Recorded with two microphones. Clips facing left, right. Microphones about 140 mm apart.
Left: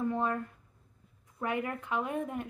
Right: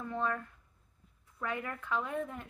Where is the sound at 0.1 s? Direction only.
15° left (ahead or behind).